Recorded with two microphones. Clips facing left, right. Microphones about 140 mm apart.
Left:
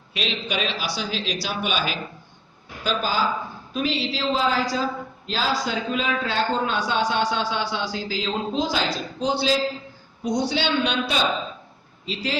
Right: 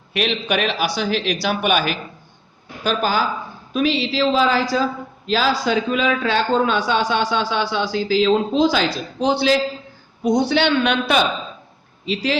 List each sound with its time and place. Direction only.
0.1 s speech: 60° right (ahead or behind)
3.7 s a man's voice: 80° right
4.7 s a man's voice: 80° right; by 11.0 s 65° right (ahead or behind)
12.0 s a man's voice: 80° right